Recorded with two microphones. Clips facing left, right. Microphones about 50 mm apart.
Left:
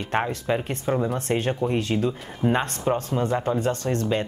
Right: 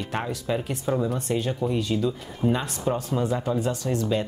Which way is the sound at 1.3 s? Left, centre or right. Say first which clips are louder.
Left 4 dB; left.